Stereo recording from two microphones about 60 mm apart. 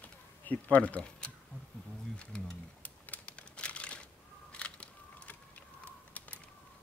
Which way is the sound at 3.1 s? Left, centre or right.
Left.